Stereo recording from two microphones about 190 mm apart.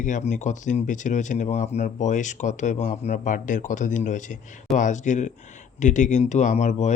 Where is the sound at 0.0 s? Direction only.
40° left (ahead or behind).